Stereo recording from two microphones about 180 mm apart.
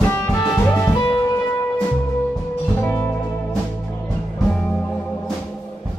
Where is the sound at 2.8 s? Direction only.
10° left (ahead or behind).